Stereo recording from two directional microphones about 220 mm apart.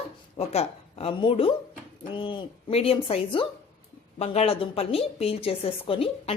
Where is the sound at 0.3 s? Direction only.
25° left (ahead or behind).